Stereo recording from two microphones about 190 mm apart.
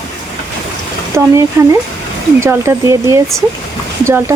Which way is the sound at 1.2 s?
15° right (ahead or behind).